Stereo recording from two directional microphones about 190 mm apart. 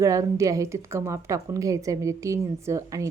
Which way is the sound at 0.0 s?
15° right (ahead or behind).